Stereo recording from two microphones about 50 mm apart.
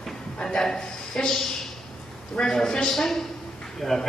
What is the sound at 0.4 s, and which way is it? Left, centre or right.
A man's voice, centre.